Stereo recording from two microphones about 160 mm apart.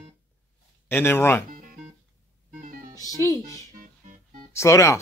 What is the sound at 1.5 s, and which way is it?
Music, 55° right (ahead or behind).